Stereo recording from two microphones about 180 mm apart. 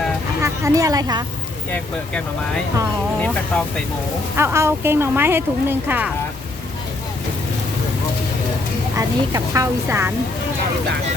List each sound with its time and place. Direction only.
0.4 s a woman's voice: 15° right (ahead or behind)
3.2 s speech: 5° left (ahead or behind)
4.4 s a woman's voice: 15° right (ahead or behind)
9.0 s a woman's voice: 20° right (ahead or behind)